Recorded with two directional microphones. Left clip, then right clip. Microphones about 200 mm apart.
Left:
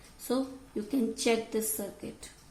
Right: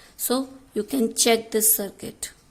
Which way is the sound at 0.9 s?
50° right (ahead or behind).